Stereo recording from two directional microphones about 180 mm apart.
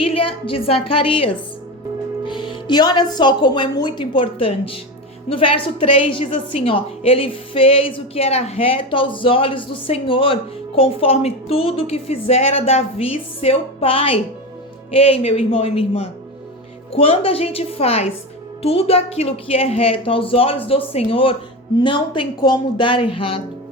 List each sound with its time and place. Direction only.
0.0 s a woman's voice: 30° left (ahead or behind)